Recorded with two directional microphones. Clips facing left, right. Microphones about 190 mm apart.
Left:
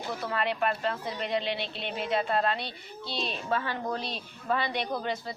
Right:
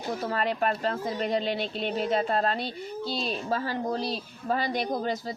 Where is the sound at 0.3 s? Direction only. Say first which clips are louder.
Right 1 dB; 40° right (ahead or behind).